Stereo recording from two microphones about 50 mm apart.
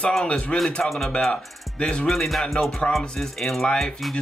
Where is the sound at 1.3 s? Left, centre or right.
Centre.